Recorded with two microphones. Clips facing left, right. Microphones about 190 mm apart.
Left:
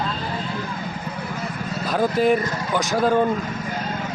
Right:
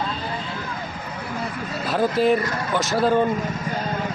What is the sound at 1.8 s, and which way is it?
Speech, centre (ahead or behind).